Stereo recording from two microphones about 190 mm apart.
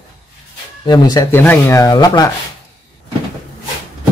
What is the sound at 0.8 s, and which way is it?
Speech, 20° left (ahead or behind).